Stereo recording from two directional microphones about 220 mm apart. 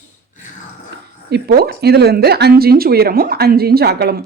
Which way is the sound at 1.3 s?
45° right (ahead or behind).